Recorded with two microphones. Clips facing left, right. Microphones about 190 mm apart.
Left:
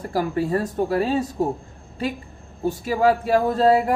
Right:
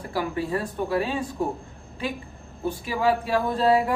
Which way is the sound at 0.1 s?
45° left (ahead or behind).